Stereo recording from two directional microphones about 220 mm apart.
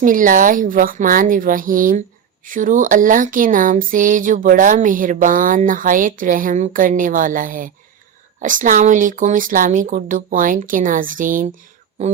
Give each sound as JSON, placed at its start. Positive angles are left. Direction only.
{"t": 0.0, "sound": "a woman's voice", "side_deg": -40}